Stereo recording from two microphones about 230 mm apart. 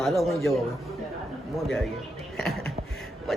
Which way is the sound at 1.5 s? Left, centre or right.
Centre.